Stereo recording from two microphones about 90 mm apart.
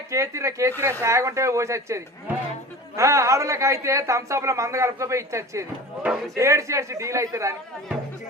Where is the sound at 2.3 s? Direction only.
20° right (ahead or behind).